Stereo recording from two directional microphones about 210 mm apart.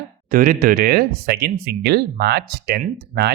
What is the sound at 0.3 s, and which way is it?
Speech, 40° right (ahead or behind).